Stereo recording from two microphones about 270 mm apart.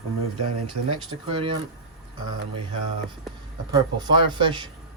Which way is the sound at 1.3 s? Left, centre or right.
Centre.